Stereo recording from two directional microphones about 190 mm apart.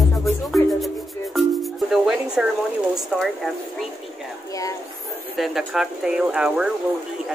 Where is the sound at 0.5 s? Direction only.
Centre (ahead or behind).